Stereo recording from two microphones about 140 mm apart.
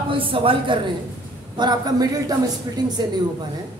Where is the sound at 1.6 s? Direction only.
30° right (ahead or behind).